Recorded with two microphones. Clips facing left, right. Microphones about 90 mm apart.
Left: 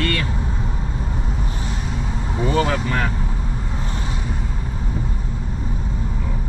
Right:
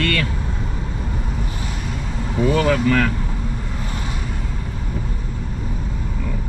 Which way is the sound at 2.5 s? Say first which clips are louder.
Right 3 dB; 15° left (ahead or behind).